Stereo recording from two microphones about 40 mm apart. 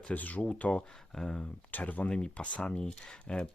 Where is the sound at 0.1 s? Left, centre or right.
Left.